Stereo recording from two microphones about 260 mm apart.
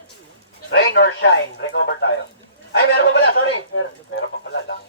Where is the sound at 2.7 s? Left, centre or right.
Left.